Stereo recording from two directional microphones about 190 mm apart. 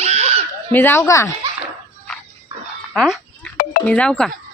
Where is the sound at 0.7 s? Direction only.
10° left (ahead or behind).